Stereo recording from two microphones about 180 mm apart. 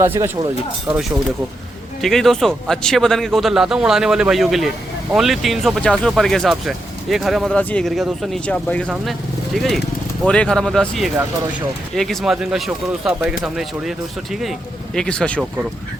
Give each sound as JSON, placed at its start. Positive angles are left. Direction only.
{"t": 0.0, "sound": "speech", "side_deg": -15}
{"t": 2.0, "sound": "speech", "side_deg": 0}
{"t": 14.9, "sound": "speech", "side_deg": 5}